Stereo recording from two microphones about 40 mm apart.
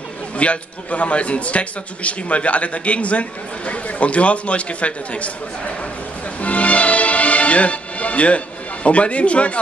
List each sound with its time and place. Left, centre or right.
0.4 s a man's voice: left
6.4 s music: left
8.8 s a man's voice: left